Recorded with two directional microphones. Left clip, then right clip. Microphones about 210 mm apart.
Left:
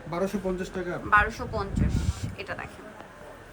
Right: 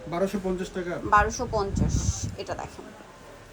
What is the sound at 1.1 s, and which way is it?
Speech, 15° right (ahead or behind).